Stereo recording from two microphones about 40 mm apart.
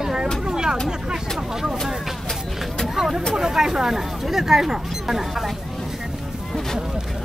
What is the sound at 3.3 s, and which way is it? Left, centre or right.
Speech, centre.